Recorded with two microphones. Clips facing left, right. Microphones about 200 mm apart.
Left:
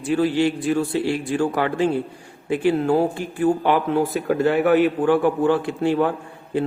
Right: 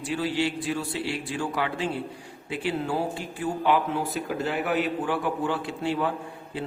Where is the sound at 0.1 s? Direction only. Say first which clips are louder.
Left 8 dB; 50° left (ahead or behind).